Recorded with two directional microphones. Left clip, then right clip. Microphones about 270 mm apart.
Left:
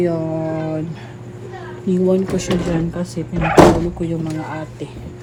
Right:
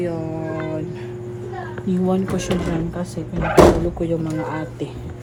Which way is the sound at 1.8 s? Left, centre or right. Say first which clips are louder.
Left 5 dB; centre.